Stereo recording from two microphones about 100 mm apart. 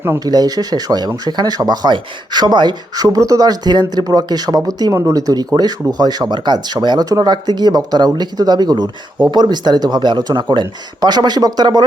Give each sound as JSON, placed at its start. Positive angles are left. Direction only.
{"t": 0.3, "sound": "speech", "side_deg": -40}